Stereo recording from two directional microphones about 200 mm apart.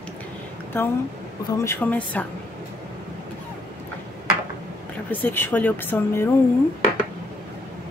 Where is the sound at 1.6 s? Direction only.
10° left (ahead or behind).